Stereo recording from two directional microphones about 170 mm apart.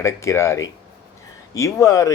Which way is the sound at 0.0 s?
15° left (ahead or behind).